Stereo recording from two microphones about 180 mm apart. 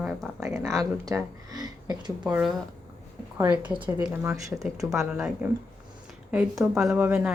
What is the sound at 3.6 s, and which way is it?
Speech, 10° right (ahead or behind).